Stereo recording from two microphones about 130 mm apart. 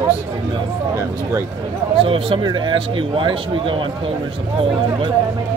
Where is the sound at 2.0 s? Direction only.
40° right (ahead or behind).